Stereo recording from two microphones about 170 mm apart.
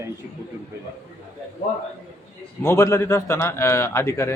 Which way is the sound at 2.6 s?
15° left (ahead or behind).